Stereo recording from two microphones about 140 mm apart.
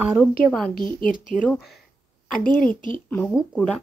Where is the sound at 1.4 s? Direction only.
Centre (ahead or behind).